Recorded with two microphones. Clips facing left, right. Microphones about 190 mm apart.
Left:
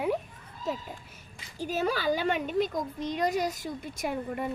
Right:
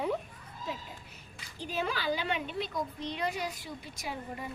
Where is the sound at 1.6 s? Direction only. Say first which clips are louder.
Left 5 dB; 45° left (ahead or behind).